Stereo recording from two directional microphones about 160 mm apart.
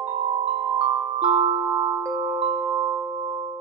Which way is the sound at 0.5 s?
35° right (ahead or behind).